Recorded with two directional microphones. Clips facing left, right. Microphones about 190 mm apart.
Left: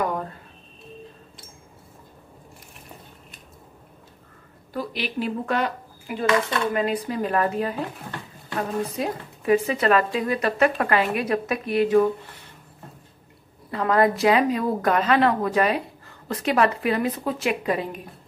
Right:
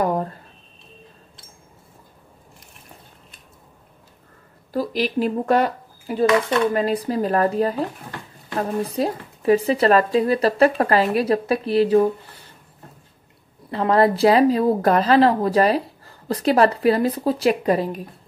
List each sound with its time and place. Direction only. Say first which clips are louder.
0.0 s a sound: right 5 dB; 35° right (ahead or behind)
4.7 s speech: right 6 dB; 40° right (ahead or behind)
13.7 s speech: right 3 dB; 30° right (ahead or behind)